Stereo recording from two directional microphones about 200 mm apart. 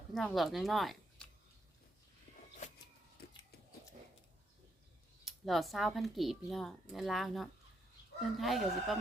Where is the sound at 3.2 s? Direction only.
50° left (ahead or behind).